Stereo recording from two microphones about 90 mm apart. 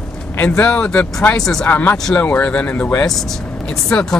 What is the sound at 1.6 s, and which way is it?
Speech, 20° left (ahead or behind).